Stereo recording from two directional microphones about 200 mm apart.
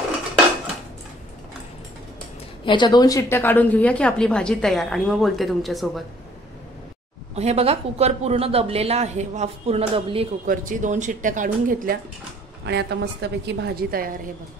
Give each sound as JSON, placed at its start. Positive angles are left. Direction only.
{"t": 2.6, "sound": "a woman's voice", "side_deg": 25}
{"t": 7.3, "sound": "speech", "side_deg": -30}
{"t": 10.4, "sound": "speech", "side_deg": -40}
{"t": 12.6, "sound": "a woman's voice", "side_deg": -55}